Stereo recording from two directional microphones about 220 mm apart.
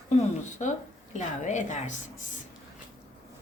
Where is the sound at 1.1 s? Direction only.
35° left (ahead or behind).